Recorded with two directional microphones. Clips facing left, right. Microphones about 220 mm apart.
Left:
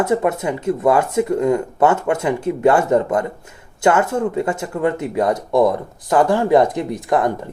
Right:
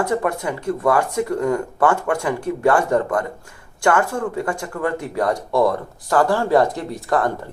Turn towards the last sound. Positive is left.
turn(degrees=20)  # may be behind; listen again after turning